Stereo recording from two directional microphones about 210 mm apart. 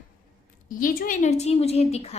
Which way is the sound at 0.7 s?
40° left (ahead or behind).